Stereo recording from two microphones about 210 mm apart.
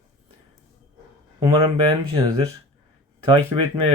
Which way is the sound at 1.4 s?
20° right (ahead or behind).